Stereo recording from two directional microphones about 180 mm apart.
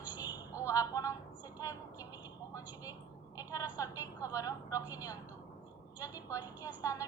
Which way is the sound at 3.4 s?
20° left (ahead or behind).